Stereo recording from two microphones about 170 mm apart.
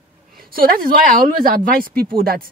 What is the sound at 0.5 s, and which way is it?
Speech, 60° right (ahead or behind).